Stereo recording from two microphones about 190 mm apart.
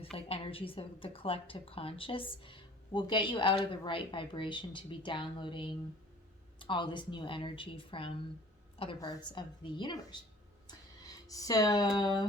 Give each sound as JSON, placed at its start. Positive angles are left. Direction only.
{"t": 0.2, "sound": "a woman's voice", "side_deg": 30}
{"t": 11.3, "sound": "a woman's voice", "side_deg": 20}